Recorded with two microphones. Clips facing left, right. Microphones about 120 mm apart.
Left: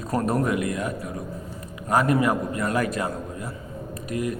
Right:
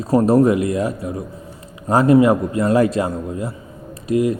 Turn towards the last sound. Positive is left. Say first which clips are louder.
# right 9 dB
turn(degrees=-30)  # may be behind; listen again after turning